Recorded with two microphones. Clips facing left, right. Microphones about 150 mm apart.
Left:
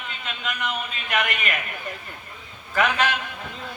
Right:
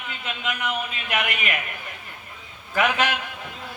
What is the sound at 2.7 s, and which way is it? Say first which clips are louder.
Speech: even; 10° right (ahead or behind).